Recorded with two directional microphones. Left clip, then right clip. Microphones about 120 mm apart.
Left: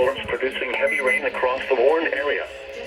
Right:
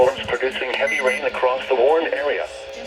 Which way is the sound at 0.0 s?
30° right (ahead or behind).